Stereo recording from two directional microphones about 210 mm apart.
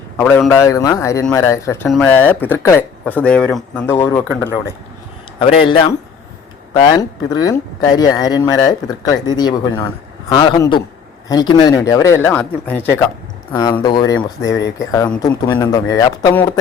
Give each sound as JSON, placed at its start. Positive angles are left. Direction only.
{"t": 0.2, "sound": "speech", "side_deg": 10}
{"t": 5.4, "sound": "speech", "side_deg": 25}
{"t": 14.4, "sound": "speech", "side_deg": 60}
{"t": 14.8, "sound": "speech", "side_deg": 15}